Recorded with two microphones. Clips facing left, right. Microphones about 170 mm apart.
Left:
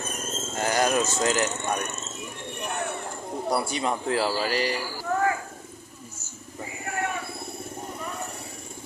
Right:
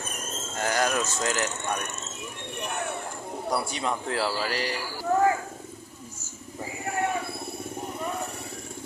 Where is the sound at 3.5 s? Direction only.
10° left (ahead or behind).